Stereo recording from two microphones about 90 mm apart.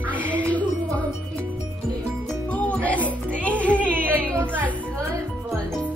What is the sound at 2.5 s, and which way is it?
Music, 15° left (ahead or behind).